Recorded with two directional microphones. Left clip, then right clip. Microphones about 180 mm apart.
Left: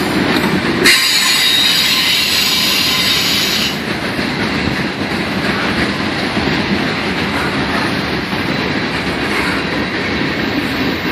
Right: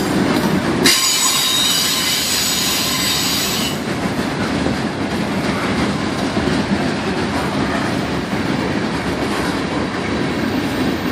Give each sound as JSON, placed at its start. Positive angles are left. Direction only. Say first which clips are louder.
{"t": 0.8, "sound": "train", "louder": "left 5 dB", "side_deg": -60}